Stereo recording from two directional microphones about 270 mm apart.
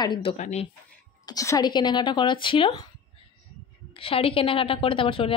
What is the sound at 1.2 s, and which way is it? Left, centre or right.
Speech, centre.